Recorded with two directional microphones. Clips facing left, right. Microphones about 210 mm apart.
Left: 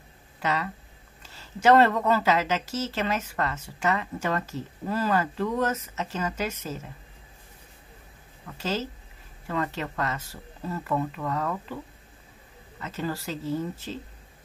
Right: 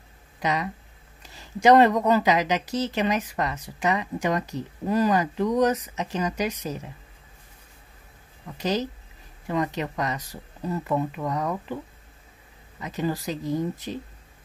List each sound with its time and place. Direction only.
0.4 s speech: 15° right (ahead or behind)
8.5 s speech: 15° right (ahead or behind)
12.8 s speech: 15° right (ahead or behind)